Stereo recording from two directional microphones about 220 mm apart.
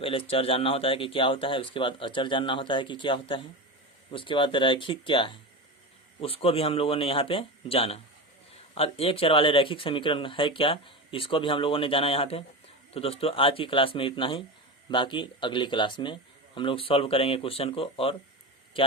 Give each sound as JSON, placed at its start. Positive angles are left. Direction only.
{"t": 0.0, "sound": "speech", "side_deg": 25}